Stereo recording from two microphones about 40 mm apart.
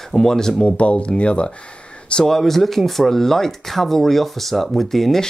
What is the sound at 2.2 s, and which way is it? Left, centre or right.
Speech, centre.